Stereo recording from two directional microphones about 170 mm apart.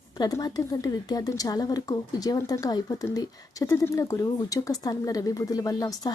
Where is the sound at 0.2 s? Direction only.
20° left (ahead or behind).